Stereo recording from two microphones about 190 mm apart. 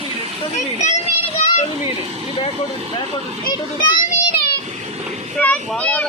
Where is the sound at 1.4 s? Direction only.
35° left (ahead or behind).